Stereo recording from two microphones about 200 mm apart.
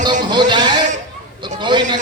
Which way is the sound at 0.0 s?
20° right (ahead or behind).